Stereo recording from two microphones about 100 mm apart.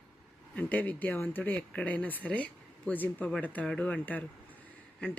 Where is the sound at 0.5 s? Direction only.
15° left (ahead or behind).